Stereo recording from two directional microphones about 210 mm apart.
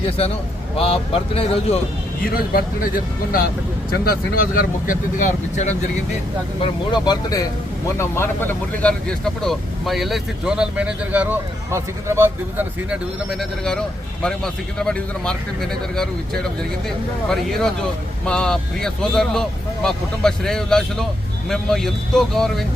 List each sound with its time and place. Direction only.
0.8 s speech: 25° left (ahead or behind)
2.2 s speech: 45° left (ahead or behind)
6.6 s speech: 20° left (ahead or behind); by 13.0 s 10° right (ahead or behind)
13.4 s speech: 5° left (ahead or behind)